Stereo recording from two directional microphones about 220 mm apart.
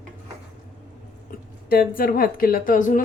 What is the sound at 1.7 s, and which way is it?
Speech, 40° left (ahead or behind).